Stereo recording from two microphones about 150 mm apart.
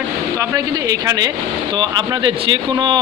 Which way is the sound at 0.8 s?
25° right (ahead or behind).